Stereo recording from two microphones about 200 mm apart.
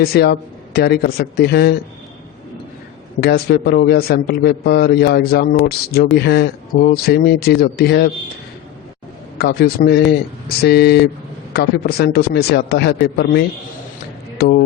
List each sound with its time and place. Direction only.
0.0 s a man's voice: 50° left (ahead or behind)
3.2 s a man's voice: 50° left (ahead or behind)
9.4 s a man's voice: 50° left (ahead or behind)